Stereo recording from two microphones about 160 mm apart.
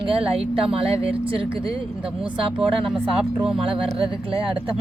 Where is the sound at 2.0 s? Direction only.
5° right (ahead or behind).